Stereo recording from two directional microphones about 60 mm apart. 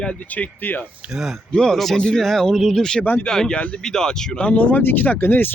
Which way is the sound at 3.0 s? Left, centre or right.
Left.